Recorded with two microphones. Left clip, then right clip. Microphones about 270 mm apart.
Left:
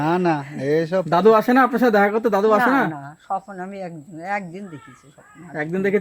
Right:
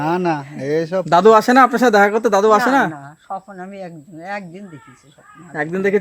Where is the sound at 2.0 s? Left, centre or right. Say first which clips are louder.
Right 4 dB; right.